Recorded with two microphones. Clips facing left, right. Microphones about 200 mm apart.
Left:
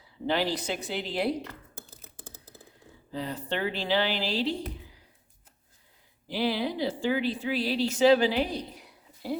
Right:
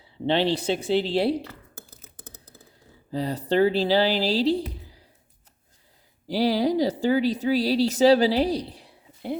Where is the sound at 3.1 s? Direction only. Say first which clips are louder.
Right 8 dB; 35° right (ahead or behind).